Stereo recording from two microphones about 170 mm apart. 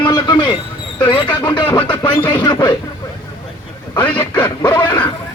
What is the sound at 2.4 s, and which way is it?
Speech, 25° left (ahead or behind).